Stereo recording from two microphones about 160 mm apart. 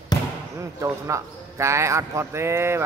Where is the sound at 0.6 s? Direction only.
15° right (ahead or behind).